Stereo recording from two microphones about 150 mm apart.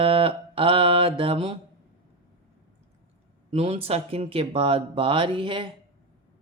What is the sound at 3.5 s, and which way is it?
Speech, 40° right (ahead or behind).